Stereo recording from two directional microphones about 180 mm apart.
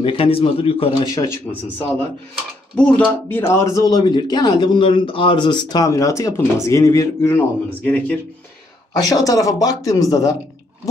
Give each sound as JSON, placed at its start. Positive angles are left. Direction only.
{"t": 0.0, "sound": "a man's voice", "side_deg": 30}
{"t": 1.1, "sound": "speech", "side_deg": 15}
{"t": 8.9, "sound": "speech", "side_deg": 20}